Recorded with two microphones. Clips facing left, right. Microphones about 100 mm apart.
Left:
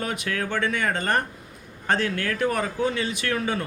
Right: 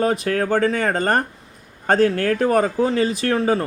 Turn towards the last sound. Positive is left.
turn(degrees=-35)  # may be behind; listen again after turning